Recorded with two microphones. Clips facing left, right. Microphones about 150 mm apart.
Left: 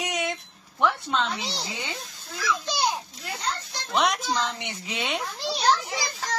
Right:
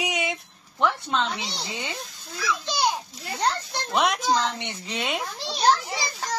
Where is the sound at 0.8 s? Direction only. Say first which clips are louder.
Even; centre (ahead or behind).